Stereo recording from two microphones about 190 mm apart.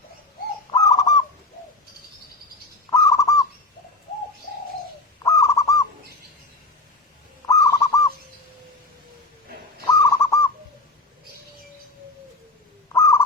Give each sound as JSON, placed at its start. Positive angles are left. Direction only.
{"t": 0.9, "sound": "bird", "side_deg": 20}
{"t": 2.9, "sound": "bird", "side_deg": 15}
{"t": 5.2, "sound": "bird", "side_deg": 15}
{"t": 7.4, "sound": "bird", "side_deg": 15}
{"t": 9.9, "sound": "bird", "side_deg": 15}
{"t": 12.9, "sound": "crow", "side_deg": 15}